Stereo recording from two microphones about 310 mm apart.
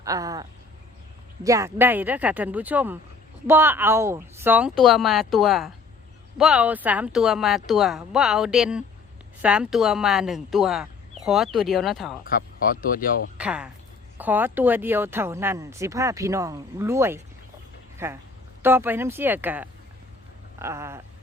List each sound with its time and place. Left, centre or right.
0.0 s speech: centre
1.5 s speech: centre
12.3 s speech: left
13.3 s speech: centre
17.9 s a sound: centre
18.6 s speech: centre